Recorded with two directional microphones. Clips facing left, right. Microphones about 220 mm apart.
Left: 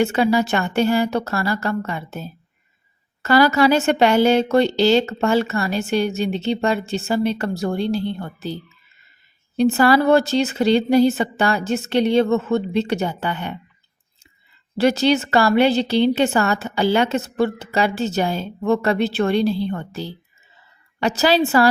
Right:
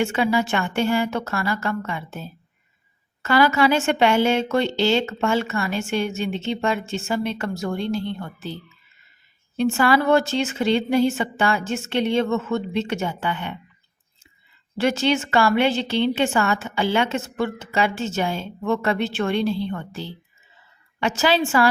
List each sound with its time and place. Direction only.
0.0 s a woman's voice: 40° left (ahead or behind)
9.6 s a woman's voice: 35° left (ahead or behind)
14.8 s a woman's voice: 35° left (ahead or behind)